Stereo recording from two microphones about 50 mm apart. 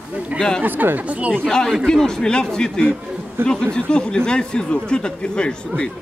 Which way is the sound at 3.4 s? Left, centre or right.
Right.